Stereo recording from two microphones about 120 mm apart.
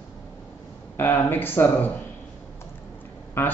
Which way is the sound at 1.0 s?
20° left (ahead or behind).